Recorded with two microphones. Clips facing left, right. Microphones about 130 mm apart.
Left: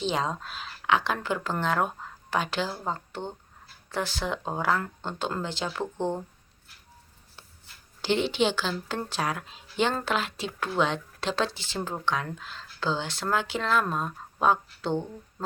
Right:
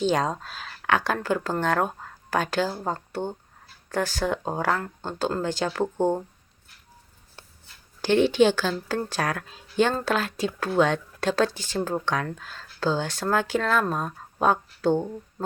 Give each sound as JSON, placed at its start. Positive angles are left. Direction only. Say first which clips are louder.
{"t": 0.0, "sound": "speech", "louder": "right 5 dB", "side_deg": -45}
{"t": 8.0, "sound": "speech", "louder": "right 6 dB", "side_deg": -45}